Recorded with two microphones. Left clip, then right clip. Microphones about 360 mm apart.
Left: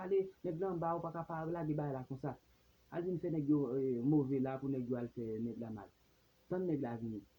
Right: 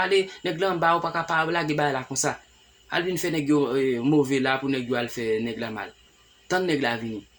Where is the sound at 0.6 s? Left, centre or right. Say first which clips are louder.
Right 17 dB; left.